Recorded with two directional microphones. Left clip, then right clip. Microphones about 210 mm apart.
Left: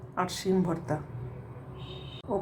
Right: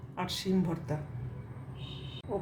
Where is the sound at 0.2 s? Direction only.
20° left (ahead or behind).